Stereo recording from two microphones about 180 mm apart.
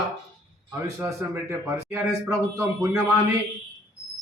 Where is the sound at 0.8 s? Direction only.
15° right (ahead or behind).